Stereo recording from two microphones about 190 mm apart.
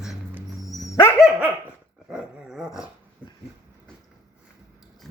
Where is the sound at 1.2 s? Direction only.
10° right (ahead or behind).